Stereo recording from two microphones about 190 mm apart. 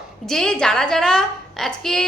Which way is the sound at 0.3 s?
5° left (ahead or behind).